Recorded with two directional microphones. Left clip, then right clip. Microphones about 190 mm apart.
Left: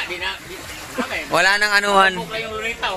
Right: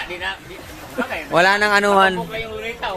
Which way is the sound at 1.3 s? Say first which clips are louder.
Right 1 dB; 5° right (ahead or behind).